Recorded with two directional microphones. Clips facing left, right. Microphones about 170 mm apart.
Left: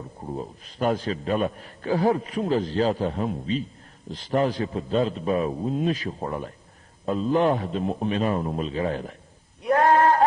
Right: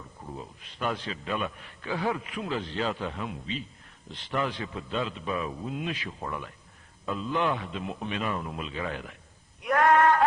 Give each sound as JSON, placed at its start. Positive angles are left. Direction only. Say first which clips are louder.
{"t": 0.0, "sound": "a man's voice", "louder": "left 8 dB", "side_deg": 35}
{"t": 9.6, "sound": "male singing", "louder": "left 3 dB", "side_deg": 30}